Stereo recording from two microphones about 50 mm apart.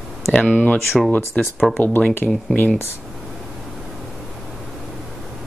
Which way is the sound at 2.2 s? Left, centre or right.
Centre.